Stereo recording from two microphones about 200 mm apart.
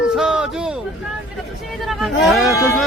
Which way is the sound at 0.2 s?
5° right (ahead or behind).